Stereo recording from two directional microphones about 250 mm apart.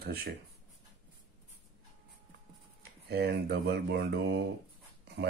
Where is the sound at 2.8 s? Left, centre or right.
Right.